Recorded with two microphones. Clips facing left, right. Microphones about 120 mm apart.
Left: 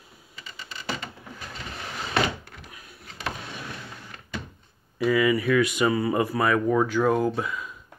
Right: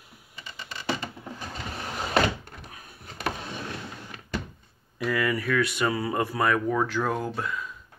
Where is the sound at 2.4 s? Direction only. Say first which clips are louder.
Right 1 dB; 45° right (ahead or behind).